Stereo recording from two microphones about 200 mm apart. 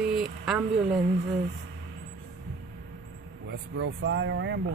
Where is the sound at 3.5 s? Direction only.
70° right (ahead or behind).